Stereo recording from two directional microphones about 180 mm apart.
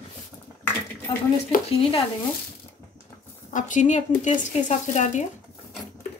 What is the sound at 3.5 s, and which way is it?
Speech, 45° left (ahead or behind).